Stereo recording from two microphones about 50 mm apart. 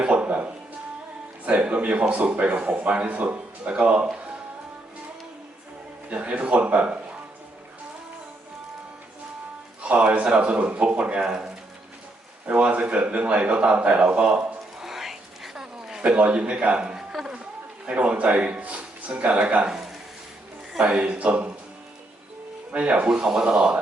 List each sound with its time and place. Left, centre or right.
0.0 s music: right
1.5 s a man's voice: right
6.1 s a man's voice: right
9.8 s a man's voice: right
12.5 s a man's voice: right
14.8 s a sound: centre
16.0 s a man's voice: right
17.1 s run: centre
17.8 s speech: right
19.6 s a man's voice: centre
22.7 s a man's voice: right
23.0 s speech: centre